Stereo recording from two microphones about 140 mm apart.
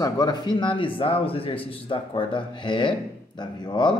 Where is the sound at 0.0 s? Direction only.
30° left (ahead or behind).